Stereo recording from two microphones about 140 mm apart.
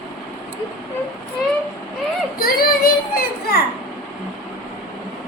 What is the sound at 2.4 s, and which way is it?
Child singing, 90° left.